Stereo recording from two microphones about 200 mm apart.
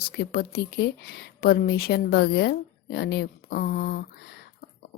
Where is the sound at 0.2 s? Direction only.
55° left (ahead or behind).